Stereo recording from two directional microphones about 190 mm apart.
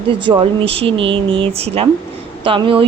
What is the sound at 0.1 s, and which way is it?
A woman's voice, 25° right (ahead or behind).